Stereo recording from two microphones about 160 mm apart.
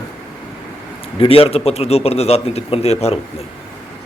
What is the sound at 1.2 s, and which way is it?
A man's voice, 35° left (ahead or behind).